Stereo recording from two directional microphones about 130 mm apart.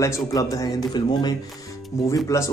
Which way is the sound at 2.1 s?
25° left (ahead or behind).